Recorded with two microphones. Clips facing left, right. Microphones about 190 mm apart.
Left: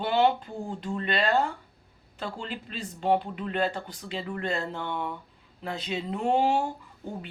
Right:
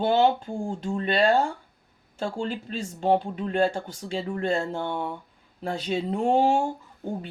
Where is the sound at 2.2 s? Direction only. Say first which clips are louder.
Right 6 dB; 45° right (ahead or behind).